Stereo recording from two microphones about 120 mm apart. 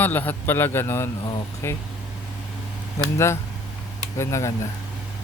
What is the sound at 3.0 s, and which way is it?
Speech, 25° left (ahead or behind).